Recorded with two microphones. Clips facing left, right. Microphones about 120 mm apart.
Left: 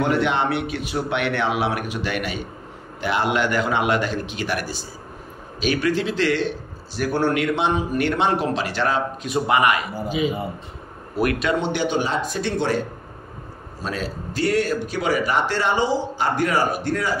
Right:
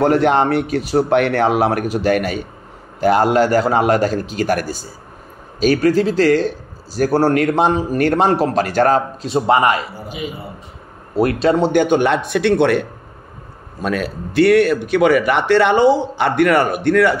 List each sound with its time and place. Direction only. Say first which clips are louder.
0.0 s a man's voice: right 7 dB; 40° right (ahead or behind)
9.2 s a man's voice: right 3 dB; 30° right (ahead or behind)
11.1 s a man's voice: right 7 dB; 30° right (ahead or behind)
11.7 s a man's voice: right 8 dB; 50° right (ahead or behind); by 12.8 s 65° right (ahead or behind)
13.8 s a man's voice: right 7 dB; 65° right (ahead or behind)